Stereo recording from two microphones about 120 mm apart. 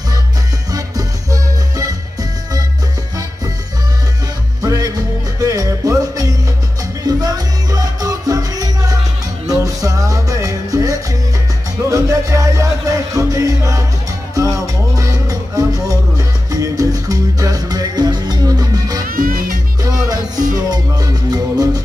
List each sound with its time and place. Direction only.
0.7 s music: 30° right (ahead or behind)
4.6 s music: 30° right (ahead or behind)
15.0 s music: 30° right (ahead or behind)